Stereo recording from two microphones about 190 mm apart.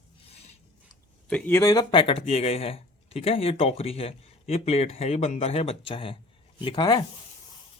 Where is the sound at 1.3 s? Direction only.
5° left (ahead or behind); by 7.1 s 25° left (ahead or behind).